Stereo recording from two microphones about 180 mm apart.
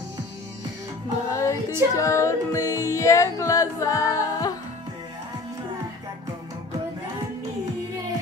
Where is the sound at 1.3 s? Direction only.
15° left (ahead or behind).